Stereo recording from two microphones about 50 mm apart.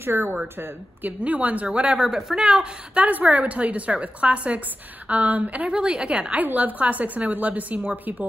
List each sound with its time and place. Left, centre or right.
0.0 s speech: right
1.0 s a woman's voice: right
2.0 s a woman's voice: centre
3.0 s a woman's voice: right
5.7 s a woman's voice: centre
6.3 s a woman's voice: right